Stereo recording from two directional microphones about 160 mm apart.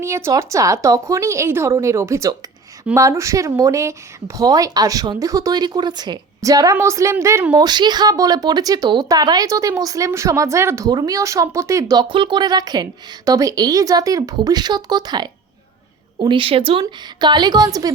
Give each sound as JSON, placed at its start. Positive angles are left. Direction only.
{"t": 0.0, "sound": "a woman's voice", "side_deg": -15}